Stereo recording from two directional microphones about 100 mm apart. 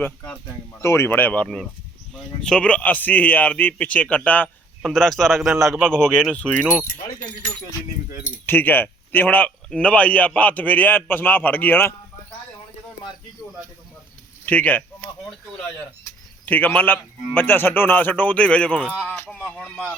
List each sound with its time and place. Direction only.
0.7 s a man's voice: 25° left (ahead or behind)
4.4 s a man's voice: centre (ahead or behind)
7.2 s speech: 40° left (ahead or behind)
8.4 s a man's voice: 20° left (ahead or behind)
14.4 s speech: 15° left (ahead or behind)
16.5 s a man's voice: 15° left (ahead or behind)